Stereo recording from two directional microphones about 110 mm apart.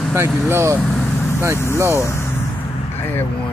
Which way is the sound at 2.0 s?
25° left (ahead or behind).